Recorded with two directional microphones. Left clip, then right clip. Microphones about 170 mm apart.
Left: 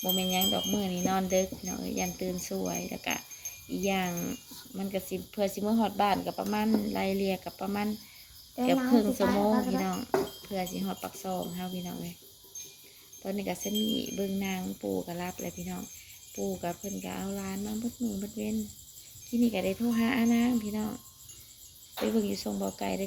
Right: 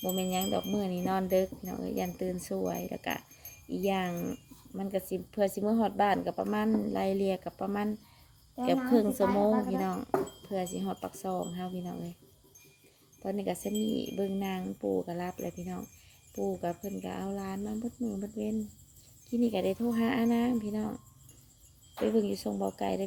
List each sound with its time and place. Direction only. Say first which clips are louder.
0.2 s speech: left 2 dB; 35° right (ahead or behind)
8.9 s speech: left 1 dB; 35° right (ahead or behind)
9.2 s a woman's voice: even; centre (ahead or behind)
9.8 s speech: left 1 dB; 35° right (ahead or behind)
13.2 s speech: right 1 dB; 35° right (ahead or behind)
22.0 s speech: right 1 dB; 40° right (ahead or behind)